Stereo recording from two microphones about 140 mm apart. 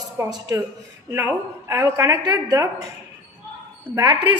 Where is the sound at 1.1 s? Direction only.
20° right (ahead or behind).